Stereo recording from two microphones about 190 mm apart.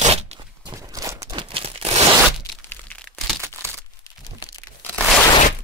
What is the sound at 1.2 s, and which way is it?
Tearing, 25° right (ahead or behind).